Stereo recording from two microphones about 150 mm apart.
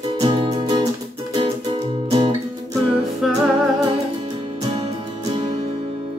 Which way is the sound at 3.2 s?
Centre (ahead or behind).